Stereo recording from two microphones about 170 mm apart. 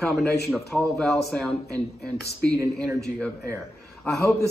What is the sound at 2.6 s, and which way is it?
Speech, 20° right (ahead or behind).